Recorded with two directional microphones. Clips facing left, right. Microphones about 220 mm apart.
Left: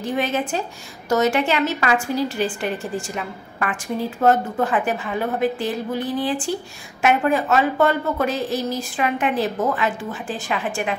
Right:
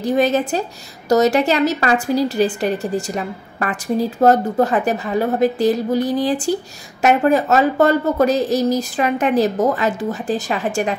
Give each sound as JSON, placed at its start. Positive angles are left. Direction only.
{"t": 0.0, "sound": "a woman's voice", "side_deg": -40}